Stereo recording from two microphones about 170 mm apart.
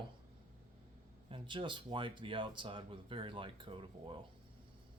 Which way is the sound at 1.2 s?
30° right (ahead or behind).